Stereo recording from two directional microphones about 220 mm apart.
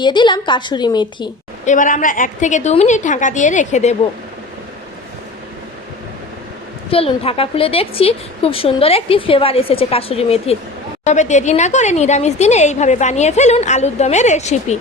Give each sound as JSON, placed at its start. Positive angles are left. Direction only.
{"t": 0.0, "sound": "a woman's voice", "side_deg": 20}
{"t": 1.6, "sound": "a woman's voice", "side_deg": 35}
{"t": 6.9, "sound": "a woman's voice", "side_deg": 25}